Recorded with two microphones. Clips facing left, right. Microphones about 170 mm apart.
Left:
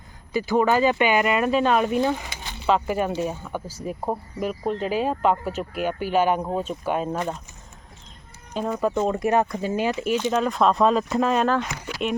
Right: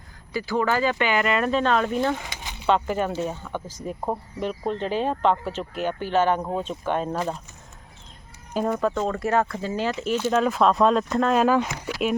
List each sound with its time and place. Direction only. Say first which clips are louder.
0.3 s speech: left 4 dB; 20° left (ahead or behind); by 7.4 s centre (ahead or behind)
8.5 s speech: right 2 dB; 5° right (ahead or behind)
8.8 s speech: left 2 dB; 15° left (ahead or behind)
10.2 s speech: right 3 dB; 5° right (ahead or behind)